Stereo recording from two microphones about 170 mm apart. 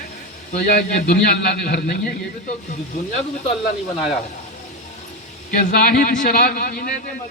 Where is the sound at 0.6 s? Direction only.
70° left (ahead or behind).